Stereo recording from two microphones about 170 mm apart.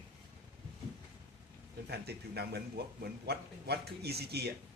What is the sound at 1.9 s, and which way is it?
A man's voice, 70° right (ahead or behind).